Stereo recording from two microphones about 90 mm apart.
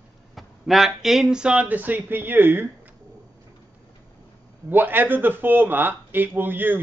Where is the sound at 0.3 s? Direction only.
Centre (ahead or behind); by 2.7 s 25° right (ahead or behind).